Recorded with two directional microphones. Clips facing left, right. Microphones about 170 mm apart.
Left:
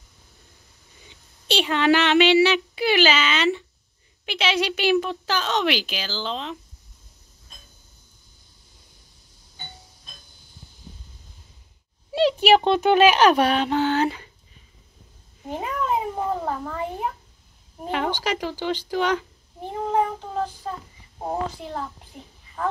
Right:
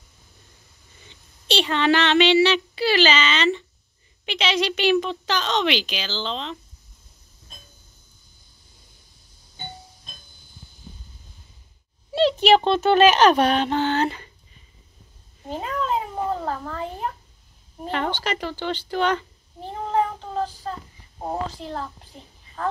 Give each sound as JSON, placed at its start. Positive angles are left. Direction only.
{"t": 1.0, "sound": "a sound", "side_deg": 10}
{"t": 3.0, "sound": "speech", "side_deg": 5}
{"t": 12.1, "sound": "speech", "side_deg": 10}
{"t": 15.4, "sound": "cat", "side_deg": 10}
{"t": 17.8, "sound": "a sound", "side_deg": 10}
{"t": 21.5, "sound": "speech", "side_deg": 10}